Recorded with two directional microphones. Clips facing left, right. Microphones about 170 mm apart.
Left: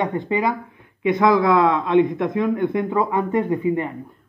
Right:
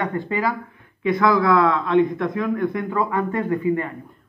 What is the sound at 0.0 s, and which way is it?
A man's voice, 20° left (ahead or behind).